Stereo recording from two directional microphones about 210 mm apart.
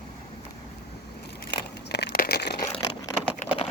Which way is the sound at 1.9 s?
50° left (ahead or behind).